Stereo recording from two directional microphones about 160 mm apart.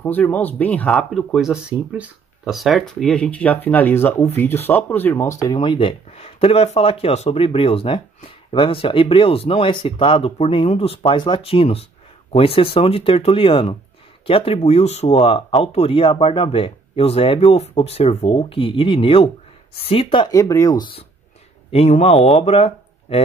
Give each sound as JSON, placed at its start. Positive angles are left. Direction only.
{"t": 0.0, "sound": "speech", "side_deg": 10}
{"t": 21.6, "sound": "speech", "side_deg": 40}